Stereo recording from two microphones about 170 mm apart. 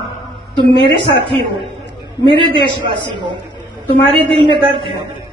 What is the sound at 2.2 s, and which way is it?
Speech, 30° right (ahead or behind).